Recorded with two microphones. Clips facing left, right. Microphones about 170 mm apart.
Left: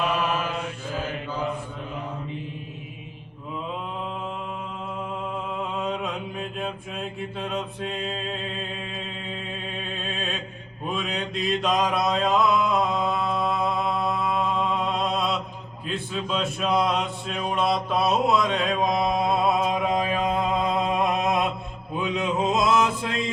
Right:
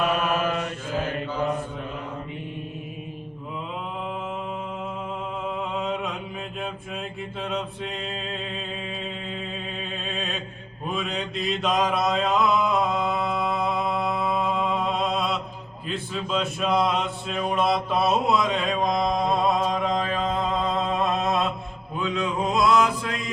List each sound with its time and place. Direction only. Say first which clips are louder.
5.7 s mantra: even; centre (ahead or behind)
10.0 s music: even; centre (ahead or behind)
10.8 s mantra: even; centre (ahead or behind); by 23.3 s 25° left (ahead or behind)